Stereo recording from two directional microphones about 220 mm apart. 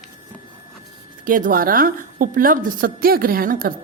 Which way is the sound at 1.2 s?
40° right (ahead or behind).